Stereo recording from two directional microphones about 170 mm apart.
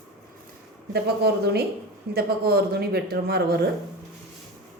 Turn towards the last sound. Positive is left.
turn(degrees=-70)  # may be behind; listen again after turning